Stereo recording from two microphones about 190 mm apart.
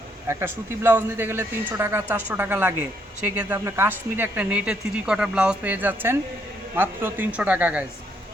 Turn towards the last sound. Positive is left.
turn(degrees=-5)  # may be behind; listen again after turning